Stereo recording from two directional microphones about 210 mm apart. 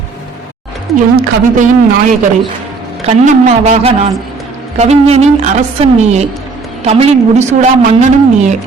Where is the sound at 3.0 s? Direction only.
30° right (ahead or behind).